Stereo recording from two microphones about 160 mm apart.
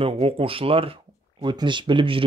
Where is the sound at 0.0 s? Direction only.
35° right (ahead or behind).